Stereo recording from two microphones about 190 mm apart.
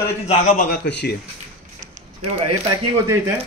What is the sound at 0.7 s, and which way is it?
Speech, 60° left (ahead or behind).